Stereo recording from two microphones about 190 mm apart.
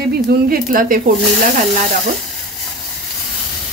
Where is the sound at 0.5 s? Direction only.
50° right (ahead or behind).